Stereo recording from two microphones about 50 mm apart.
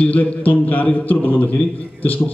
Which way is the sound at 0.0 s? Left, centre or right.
Left.